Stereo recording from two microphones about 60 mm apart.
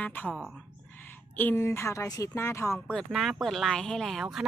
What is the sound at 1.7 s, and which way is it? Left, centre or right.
Speech, left.